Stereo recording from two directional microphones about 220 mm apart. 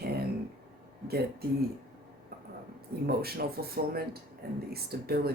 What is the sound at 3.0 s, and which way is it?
Speech, 45° right (ahead or behind).